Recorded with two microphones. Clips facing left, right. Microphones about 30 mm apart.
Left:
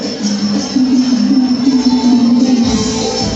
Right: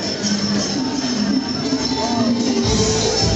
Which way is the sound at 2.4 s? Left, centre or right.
Left.